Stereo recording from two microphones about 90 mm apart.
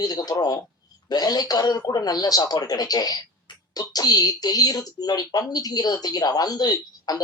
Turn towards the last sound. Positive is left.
turn(degrees=50)  # may be behind; listen again after turning